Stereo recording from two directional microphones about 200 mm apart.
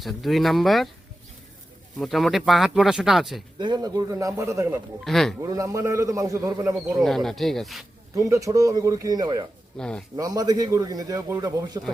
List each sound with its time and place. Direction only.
0.0 s speech: centre (ahead or behind)
2.0 s speech: centre (ahead or behind)
3.6 s a man's voice: 20° right (ahead or behind)
5.0 s speech: centre (ahead or behind)
5.4 s a man's voice: 15° right (ahead or behind)
7.0 s speech: centre (ahead or behind)
8.1 s a man's voice: 15° right (ahead or behind)
9.7 s speech: 5° left (ahead or behind)
10.2 s a man's voice: 20° right (ahead or behind)